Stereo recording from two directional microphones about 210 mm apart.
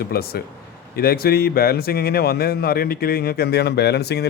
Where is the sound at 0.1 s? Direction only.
45° left (ahead or behind).